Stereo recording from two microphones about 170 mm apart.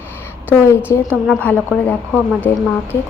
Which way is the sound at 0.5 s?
15° left (ahead or behind).